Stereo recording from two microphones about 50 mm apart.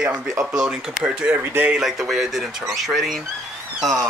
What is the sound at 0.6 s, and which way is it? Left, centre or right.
Speech, centre.